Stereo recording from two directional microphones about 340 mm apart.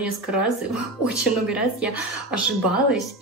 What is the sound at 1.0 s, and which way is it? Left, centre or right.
A woman's voice, centre.